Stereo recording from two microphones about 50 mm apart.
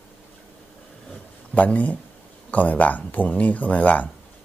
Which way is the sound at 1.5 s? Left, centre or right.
Left.